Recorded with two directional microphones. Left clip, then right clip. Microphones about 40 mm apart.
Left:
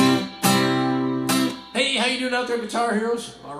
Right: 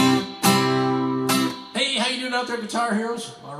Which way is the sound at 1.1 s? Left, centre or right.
Centre.